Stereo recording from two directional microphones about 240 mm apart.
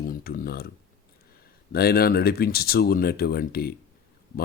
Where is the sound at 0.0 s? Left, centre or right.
Left.